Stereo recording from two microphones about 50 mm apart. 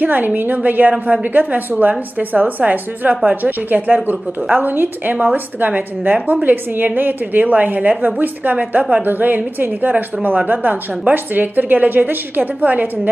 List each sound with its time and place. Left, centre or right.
0.0 s a woman's voice: right